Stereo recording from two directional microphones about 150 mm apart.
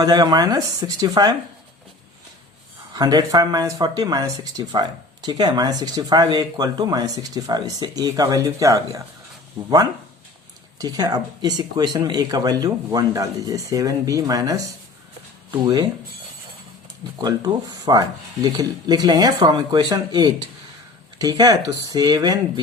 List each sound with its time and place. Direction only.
0.0 s speech: 30° right (ahead or behind)
2.9 s speech: 25° right (ahead or behind)
10.8 s speech: 25° right (ahead or behind)
15.6 s speech: 25° right (ahead or behind)
17.2 s speech: 25° right (ahead or behind)